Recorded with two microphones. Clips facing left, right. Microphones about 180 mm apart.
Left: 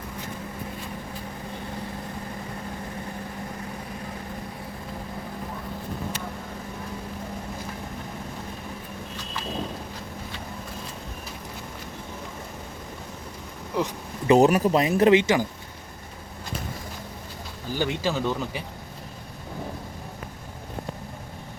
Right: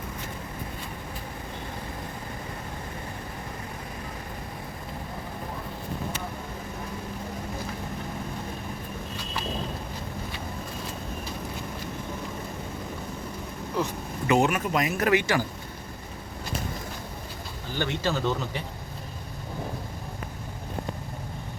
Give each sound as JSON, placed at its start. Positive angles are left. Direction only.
{"t": 13.8, "sound": "a sound", "side_deg": 15}
{"t": 14.3, "sound": "speech", "side_deg": 35}
{"t": 17.7, "sound": "speech", "side_deg": 10}